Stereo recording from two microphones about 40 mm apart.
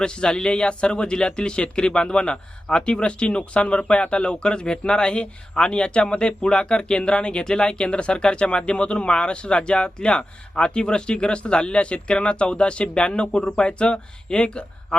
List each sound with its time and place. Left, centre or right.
0.0 s a man's voice: left